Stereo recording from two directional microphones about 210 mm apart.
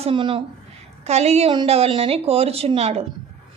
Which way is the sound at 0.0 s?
25° right (ahead or behind).